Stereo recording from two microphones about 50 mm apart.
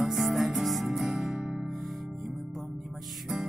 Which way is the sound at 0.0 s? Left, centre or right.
Centre.